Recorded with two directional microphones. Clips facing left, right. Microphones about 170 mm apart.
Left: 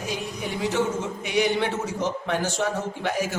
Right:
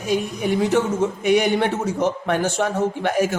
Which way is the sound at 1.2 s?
55° right (ahead or behind).